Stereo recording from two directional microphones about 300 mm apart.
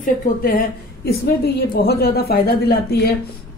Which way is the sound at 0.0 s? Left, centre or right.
Left.